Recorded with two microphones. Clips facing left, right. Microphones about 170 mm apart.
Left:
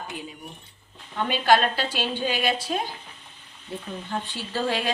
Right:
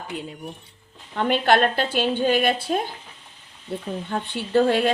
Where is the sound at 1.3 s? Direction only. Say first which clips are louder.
Right 2 dB; 55° right (ahead or behind).